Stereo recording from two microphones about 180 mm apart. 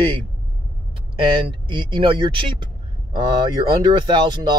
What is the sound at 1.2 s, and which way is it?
Speech, 25° right (ahead or behind).